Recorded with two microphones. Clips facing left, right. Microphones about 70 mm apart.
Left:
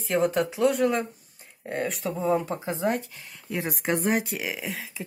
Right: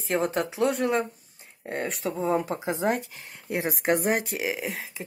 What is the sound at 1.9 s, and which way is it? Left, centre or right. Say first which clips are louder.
Speech: left 1 dB; centre.